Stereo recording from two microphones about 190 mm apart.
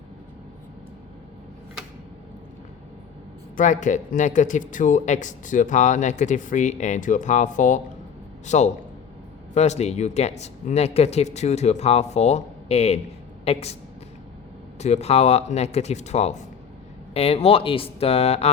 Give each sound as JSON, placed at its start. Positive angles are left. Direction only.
{"t": 3.6, "sound": "speech", "side_deg": 40}
{"t": 14.8, "sound": "speech", "side_deg": 35}